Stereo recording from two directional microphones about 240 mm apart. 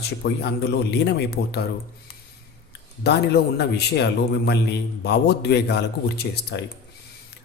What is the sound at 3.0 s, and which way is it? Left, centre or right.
Speech, left.